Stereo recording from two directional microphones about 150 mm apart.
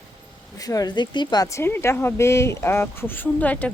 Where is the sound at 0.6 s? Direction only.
25° left (ahead or behind).